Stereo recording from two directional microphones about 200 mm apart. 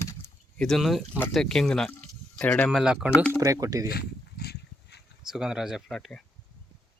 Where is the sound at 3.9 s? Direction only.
50° left (ahead or behind).